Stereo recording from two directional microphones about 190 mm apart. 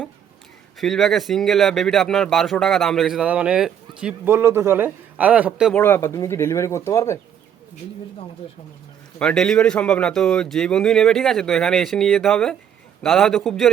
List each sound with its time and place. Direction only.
0.8 s speech: centre (ahead or behind)
5.7 s speech: 10° left (ahead or behind)
9.1 s speech: 5° left (ahead or behind)